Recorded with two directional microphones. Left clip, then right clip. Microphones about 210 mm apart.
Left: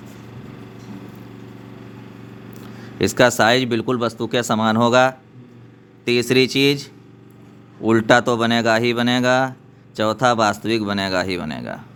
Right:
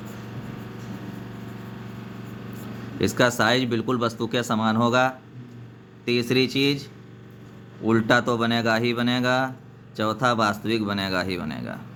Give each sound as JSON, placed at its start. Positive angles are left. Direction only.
{"t": 3.0, "sound": "speech", "side_deg": 40}
{"t": 7.9, "sound": "speech", "side_deg": 35}